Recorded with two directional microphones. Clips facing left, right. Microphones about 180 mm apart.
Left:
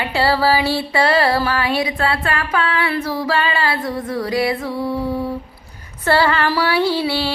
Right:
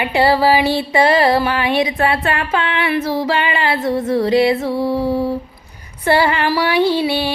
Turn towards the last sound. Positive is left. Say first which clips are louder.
# right 3 dB
turn(degrees=-20)  # may be behind; listen again after turning